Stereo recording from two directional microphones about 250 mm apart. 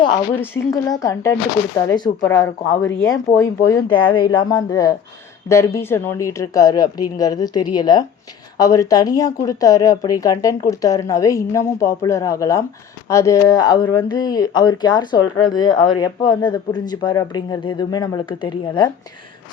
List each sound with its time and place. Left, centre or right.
0.0 s speech: centre